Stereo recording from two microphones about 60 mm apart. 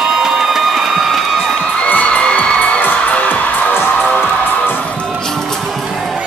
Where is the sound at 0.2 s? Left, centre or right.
Centre.